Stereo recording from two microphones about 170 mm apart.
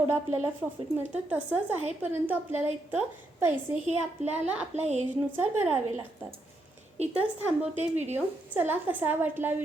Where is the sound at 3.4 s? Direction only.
15° right (ahead or behind).